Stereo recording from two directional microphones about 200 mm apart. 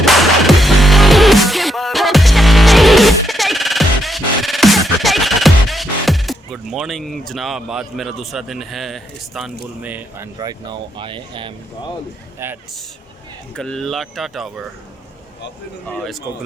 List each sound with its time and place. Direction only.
0.0 s music: centre (ahead or behind)
10.3 s speech: 20° right (ahead or behind)
13.6 s speech: 5° left (ahead or behind)
15.9 s speech: centre (ahead or behind)